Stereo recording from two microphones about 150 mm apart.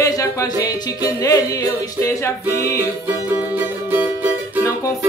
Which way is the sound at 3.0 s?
15° right (ahead or behind).